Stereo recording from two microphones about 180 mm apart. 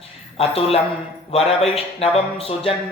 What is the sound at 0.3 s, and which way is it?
Speech, 35° left (ahead or behind).